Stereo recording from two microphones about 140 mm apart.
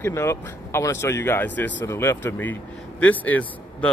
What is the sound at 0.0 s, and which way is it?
Speech, 20° left (ahead or behind).